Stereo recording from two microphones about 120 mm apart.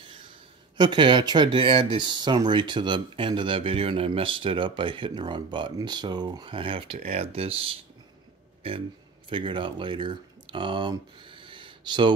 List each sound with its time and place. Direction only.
0.7 s speech: 40° right (ahead or behind)